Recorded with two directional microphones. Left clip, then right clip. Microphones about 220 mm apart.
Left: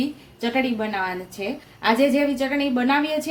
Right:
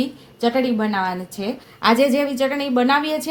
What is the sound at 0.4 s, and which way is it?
A woman's voice, 30° right (ahead or behind).